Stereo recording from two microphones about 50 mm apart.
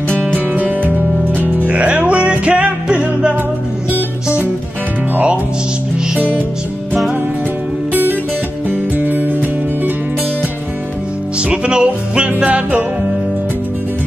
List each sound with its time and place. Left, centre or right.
0.6 s music: right
1.7 s music: right
5.1 s music: right
7.9 s music: right
11.3 s music: right